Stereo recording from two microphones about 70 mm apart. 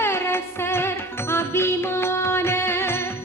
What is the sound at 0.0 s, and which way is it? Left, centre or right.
Music, left.